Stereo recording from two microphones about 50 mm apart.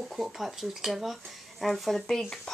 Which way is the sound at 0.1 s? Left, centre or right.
Centre.